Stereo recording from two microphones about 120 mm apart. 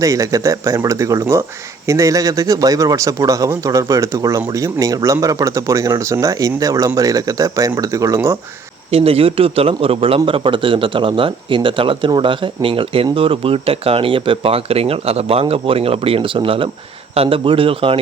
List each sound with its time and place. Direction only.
0.0 s speech: 30° right (ahead or behind)
8.9 s speech: 55° right (ahead or behind)